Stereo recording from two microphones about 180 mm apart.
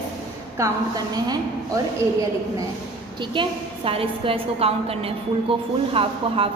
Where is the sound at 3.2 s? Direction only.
30° right (ahead or behind).